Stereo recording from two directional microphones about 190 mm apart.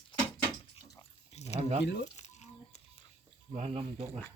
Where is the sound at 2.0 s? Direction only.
35° left (ahead or behind).